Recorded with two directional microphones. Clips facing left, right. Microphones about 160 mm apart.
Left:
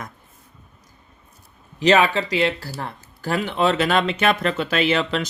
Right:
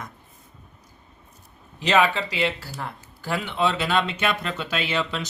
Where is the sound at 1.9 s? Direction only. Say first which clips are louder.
Left 4 dB; 40° left (ahead or behind).